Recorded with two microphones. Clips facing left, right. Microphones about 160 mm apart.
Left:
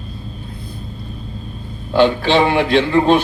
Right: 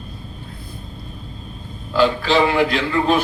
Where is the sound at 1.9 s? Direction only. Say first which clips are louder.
Left 3 dB; 25° left (ahead or behind).